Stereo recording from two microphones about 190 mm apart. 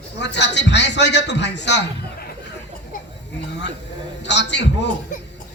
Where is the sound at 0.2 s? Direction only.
65° left (ahead or behind).